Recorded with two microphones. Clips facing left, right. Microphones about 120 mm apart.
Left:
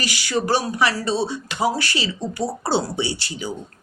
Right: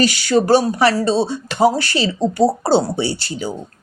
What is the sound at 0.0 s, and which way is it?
Speech, 30° right (ahead or behind).